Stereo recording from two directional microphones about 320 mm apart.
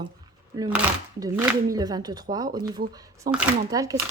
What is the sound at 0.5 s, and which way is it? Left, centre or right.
Speech, centre.